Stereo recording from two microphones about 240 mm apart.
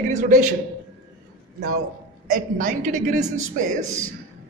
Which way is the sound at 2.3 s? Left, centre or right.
Right.